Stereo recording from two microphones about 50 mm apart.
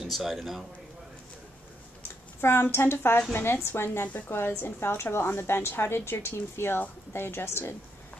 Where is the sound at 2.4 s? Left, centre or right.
Left.